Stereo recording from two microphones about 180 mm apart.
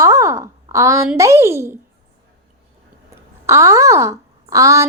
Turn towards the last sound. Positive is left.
turn(degrees=-20)  # may be behind; listen again after turning